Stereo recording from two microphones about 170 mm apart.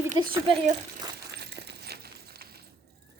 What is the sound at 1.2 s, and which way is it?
Coin, 75° right (ahead or behind).